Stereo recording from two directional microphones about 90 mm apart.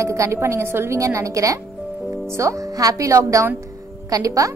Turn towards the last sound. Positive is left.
turn(degrees=-40)  # may be behind; listen again after turning